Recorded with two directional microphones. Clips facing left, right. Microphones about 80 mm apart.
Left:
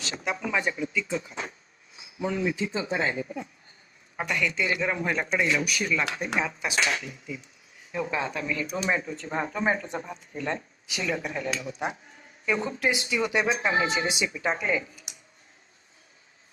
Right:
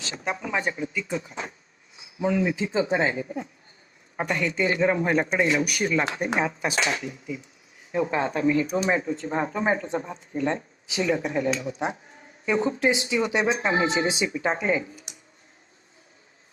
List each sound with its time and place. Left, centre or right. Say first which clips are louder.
0.3 s speech: right 1 dB; right
2.2 s speech: right 4 dB; right